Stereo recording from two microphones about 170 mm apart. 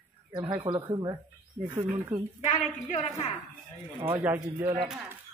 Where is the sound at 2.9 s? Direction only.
40° left (ahead or behind).